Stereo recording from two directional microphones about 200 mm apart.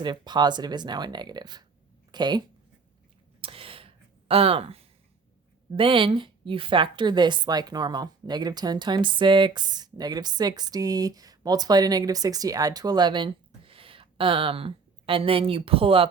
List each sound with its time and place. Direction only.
0.0 s a woman's voice: 20° right (ahead or behind)
3.4 s a sound: 25° right (ahead or behind)
5.7 s a woman's voice: 25° right (ahead or behind)